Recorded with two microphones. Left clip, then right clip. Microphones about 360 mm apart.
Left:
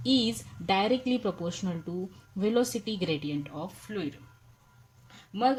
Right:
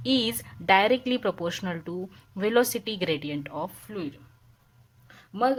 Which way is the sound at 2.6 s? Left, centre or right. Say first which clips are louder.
Right 4 dB; right.